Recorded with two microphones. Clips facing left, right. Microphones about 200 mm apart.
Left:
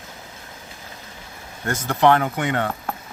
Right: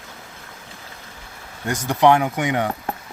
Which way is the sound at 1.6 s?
15° right (ahead or behind).